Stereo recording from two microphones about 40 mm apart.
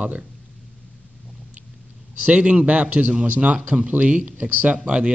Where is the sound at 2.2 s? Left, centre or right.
Right.